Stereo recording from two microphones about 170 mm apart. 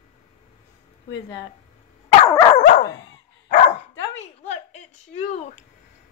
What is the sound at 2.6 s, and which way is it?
Dog, 50° left (ahead or behind).